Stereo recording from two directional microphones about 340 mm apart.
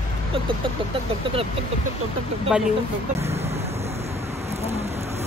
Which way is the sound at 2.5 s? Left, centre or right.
Centre.